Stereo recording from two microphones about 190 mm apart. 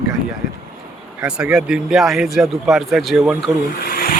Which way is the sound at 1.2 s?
5° right (ahead or behind).